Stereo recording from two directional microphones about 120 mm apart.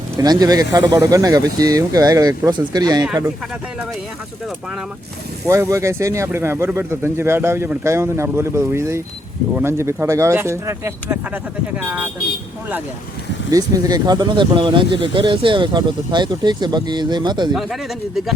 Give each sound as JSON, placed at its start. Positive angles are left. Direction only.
{"t": 0.2, "sound": "speech", "side_deg": -35}
{"t": 5.5, "sound": "speech", "side_deg": -20}
{"t": 13.5, "sound": "speech", "side_deg": -30}
{"t": 17.5, "sound": "speech", "side_deg": 0}